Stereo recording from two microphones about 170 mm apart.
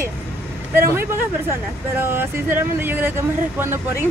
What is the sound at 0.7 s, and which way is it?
Speech, 15° right (ahead or behind).